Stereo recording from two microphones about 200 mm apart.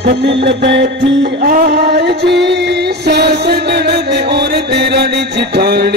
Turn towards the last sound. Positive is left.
turn(degrees=-55)  # may be behind; listen again after turning